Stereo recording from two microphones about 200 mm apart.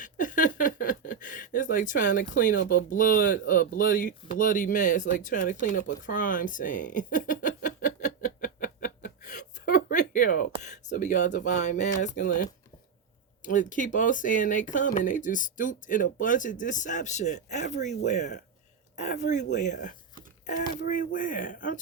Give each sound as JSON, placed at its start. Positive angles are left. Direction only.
{"t": 0.0, "sound": "a sound", "side_deg": 40}
{"t": 2.1, "sound": "speech", "side_deg": 45}
{"t": 5.4, "sound": "a sound", "side_deg": 40}
{"t": 10.6, "sound": "speech", "side_deg": 35}
{"t": 17.6, "sound": "speech", "side_deg": 60}
{"t": 17.8, "sound": "speech", "side_deg": 35}